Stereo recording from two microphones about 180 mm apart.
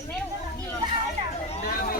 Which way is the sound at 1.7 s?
50° left (ahead or behind).